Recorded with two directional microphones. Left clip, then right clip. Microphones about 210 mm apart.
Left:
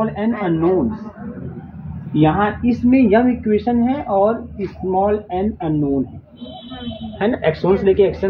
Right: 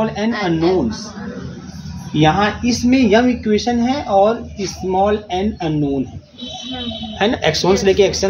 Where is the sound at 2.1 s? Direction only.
30° right (ahead or behind).